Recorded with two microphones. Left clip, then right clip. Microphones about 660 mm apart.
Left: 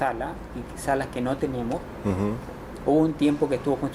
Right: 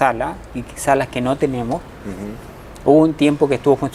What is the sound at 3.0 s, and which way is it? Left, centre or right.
Speech, right.